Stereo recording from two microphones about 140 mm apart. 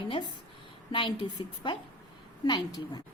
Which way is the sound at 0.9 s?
35° left (ahead or behind).